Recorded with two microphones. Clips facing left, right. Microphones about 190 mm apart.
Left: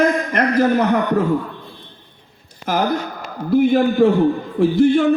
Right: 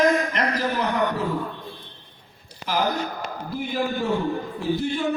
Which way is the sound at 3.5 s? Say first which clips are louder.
Left 13 dB; 60° left (ahead or behind).